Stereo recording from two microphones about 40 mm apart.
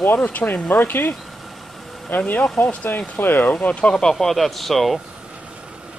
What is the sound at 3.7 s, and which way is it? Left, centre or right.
Speech, left.